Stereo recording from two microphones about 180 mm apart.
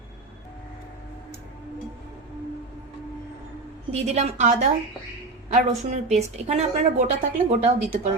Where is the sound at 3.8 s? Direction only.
35° right (ahead or behind).